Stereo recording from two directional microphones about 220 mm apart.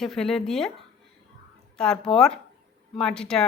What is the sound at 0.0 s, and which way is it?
Speech, centre (ahead or behind).